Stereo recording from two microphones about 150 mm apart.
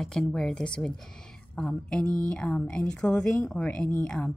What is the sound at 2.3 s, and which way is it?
A woman's voice, 5° left (ahead or behind).